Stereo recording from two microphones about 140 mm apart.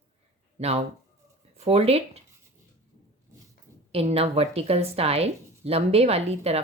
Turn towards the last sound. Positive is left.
turn(degrees=-50)  # may be behind; listen again after turning